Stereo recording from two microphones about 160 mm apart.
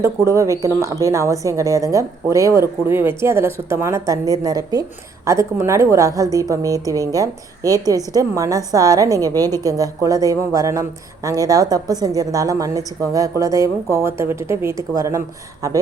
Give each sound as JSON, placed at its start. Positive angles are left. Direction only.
{"t": 0.0, "sound": "a woman's voice", "side_deg": -20}